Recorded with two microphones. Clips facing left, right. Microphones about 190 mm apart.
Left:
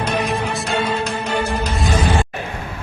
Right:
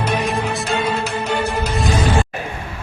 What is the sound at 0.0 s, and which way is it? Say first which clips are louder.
Music: even; 5° right (ahead or behind).